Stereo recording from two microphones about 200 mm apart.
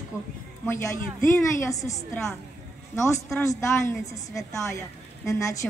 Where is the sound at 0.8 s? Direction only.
15° left (ahead or behind).